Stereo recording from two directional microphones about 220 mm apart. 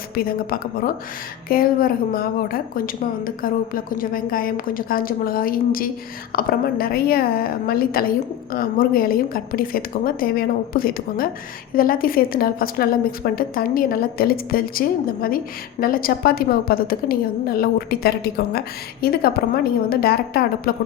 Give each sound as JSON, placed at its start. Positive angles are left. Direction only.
{"t": 0.2, "sound": "a woman's voice", "side_deg": 40}